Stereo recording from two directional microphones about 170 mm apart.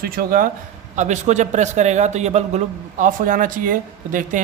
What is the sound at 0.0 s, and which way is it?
Speech, 60° right (ahead or behind).